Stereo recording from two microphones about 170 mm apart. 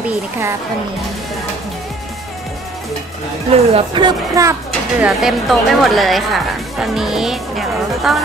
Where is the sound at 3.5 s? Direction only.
30° right (ahead or behind).